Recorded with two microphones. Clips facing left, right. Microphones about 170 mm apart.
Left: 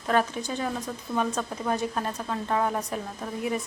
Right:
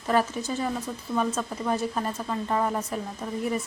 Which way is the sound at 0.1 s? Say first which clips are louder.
Right 1 dB; 5° right (ahead or behind).